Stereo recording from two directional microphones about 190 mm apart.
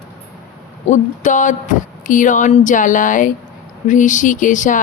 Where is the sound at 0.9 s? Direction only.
40° left (ahead or behind).